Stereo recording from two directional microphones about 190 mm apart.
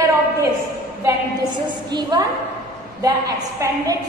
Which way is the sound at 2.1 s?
20° right (ahead or behind).